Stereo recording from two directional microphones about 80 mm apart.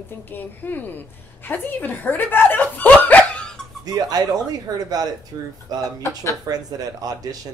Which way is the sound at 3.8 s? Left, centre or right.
Right.